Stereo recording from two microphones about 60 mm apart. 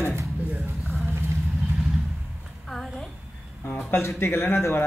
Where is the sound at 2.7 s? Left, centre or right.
Centre.